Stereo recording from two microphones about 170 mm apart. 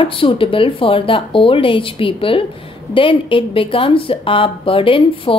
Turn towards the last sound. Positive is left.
turn(degrees=30)  # may be behind; listen again after turning